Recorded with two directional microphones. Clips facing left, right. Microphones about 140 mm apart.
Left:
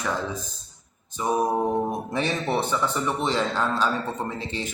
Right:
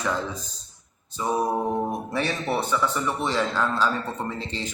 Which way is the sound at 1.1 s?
15° left (ahead or behind).